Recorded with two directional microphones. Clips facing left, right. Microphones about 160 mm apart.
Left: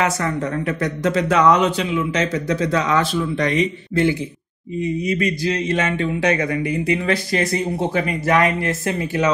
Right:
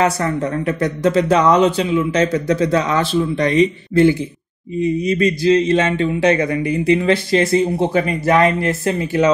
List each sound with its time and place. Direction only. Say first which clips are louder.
0.0 s a man's voice: right 3 dB; 35° right (ahead or behind)
5.2 s speech: right 7 dB; 30° right (ahead or behind)